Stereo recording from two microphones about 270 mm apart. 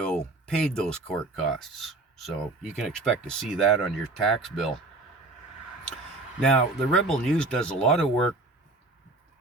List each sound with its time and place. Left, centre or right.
0.0 s speech: centre
6.4 s speech: centre